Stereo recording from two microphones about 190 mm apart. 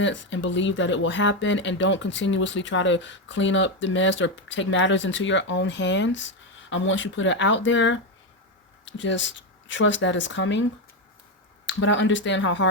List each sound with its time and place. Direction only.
0.0 s speech: 75° left (ahead or behind)
11.6 s speech: 75° left (ahead or behind)